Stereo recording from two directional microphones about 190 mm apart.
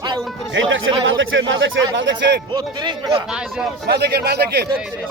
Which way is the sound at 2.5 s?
25° right (ahead or behind).